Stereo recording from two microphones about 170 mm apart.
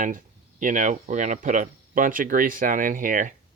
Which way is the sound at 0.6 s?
50° right (ahead or behind).